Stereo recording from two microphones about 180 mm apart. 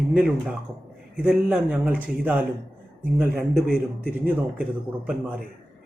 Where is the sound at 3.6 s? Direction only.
55° left (ahead or behind).